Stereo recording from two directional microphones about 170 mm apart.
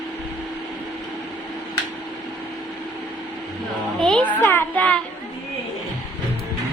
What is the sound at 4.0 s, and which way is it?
A child's voice, 5° left (ahead or behind).